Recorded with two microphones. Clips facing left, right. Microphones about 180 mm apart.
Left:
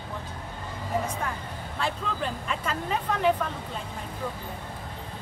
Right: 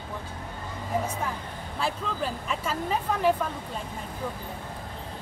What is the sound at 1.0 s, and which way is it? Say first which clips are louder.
Speech: even; 5° right (ahead or behind).